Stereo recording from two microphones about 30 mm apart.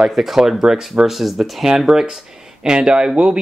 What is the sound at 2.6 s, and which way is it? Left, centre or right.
Speech, right.